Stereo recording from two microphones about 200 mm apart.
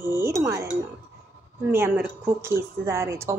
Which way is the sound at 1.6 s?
10° right (ahead or behind).